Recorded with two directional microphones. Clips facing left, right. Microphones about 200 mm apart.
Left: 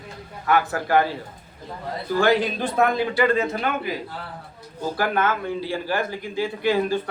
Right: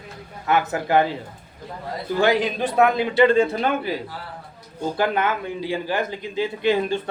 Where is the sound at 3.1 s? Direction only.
30° right (ahead or behind).